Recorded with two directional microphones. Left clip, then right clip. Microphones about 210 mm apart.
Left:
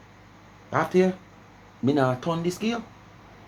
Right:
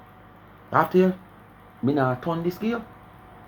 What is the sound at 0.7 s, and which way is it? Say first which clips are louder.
Speech: right 2 dB; 10° right (ahead or behind).